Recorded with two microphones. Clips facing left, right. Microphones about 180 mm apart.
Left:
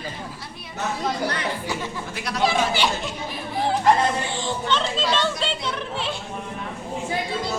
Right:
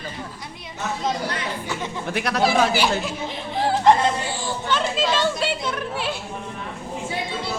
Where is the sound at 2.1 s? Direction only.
60° right (ahead or behind).